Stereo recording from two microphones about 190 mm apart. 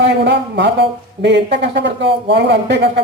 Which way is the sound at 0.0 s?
65° right (ahead or behind).